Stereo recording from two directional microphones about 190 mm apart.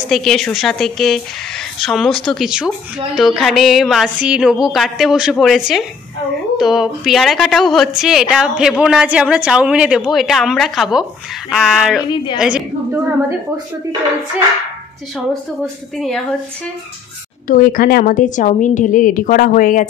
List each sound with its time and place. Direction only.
0.1 s a woman's voice: centre (ahead or behind)
12.4 s a sound: 5° right (ahead or behind)
15.6 s a woman's voice: 5° left (ahead or behind)
17.5 s a woman's voice: 50° left (ahead or behind)